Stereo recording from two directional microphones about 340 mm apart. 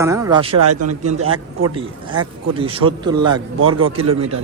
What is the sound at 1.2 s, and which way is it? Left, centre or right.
Speech, right.